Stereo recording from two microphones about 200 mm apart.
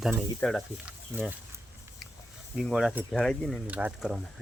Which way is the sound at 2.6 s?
Centre (ahead or behind).